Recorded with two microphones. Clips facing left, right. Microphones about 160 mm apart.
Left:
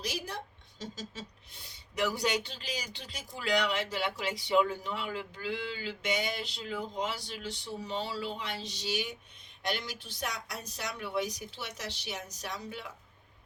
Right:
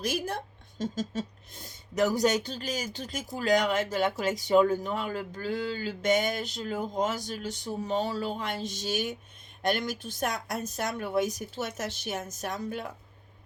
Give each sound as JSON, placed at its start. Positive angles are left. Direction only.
{"t": 0.0, "sound": "speech", "side_deg": -50}